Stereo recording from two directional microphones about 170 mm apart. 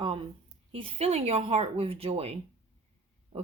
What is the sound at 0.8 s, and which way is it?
Speech, 35° right (ahead or behind).